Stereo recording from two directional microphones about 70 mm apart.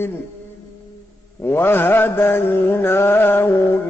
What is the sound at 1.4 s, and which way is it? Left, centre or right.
Mantra, left.